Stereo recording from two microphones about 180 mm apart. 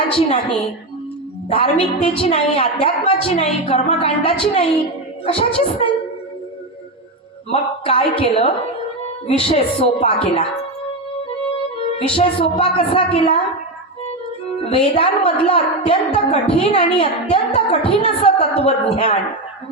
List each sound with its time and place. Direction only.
0.1 s a woman's voice: 30° left (ahead or behind)
1.5 s a woman's voice: 30° left (ahead or behind)
7.5 s a woman's voice: 30° left (ahead or behind)
11.8 s a woman's voice: 30° left (ahead or behind)
14.6 s a woman's voice: 30° left (ahead or behind)